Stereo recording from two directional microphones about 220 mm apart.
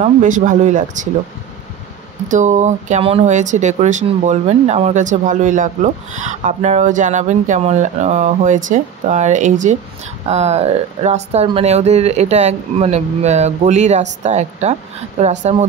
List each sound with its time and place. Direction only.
0.0 s speech: 35° right (ahead or behind)
2.2 s speech: 35° right (ahead or behind)